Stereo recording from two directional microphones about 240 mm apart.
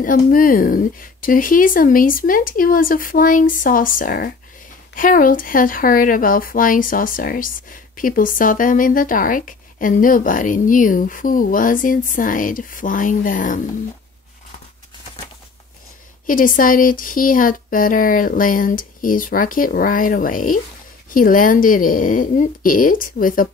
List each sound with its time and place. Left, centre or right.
0.0 s speech: left
16.3 s speech: left